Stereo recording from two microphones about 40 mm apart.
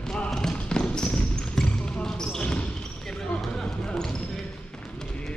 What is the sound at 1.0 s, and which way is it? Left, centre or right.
Basketball bounce, left.